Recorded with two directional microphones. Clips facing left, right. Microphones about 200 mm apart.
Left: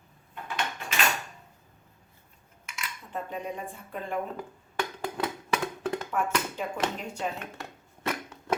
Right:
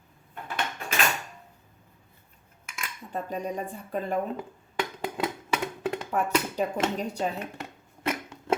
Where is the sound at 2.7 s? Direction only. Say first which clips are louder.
Right 2 dB; 50° right (ahead or behind).